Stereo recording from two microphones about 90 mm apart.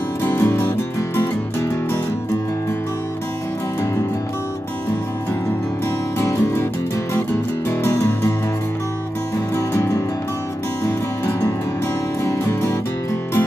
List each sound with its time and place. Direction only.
0.2 s music: 25° left (ahead or behind)
6.1 s music: 30° left (ahead or behind)
7.9 s music: 40° left (ahead or behind)
9.6 s music: 35° left (ahead or behind)